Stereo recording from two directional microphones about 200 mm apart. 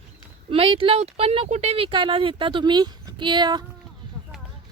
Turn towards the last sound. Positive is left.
turn(degrees=-20)  # may be behind; listen again after turning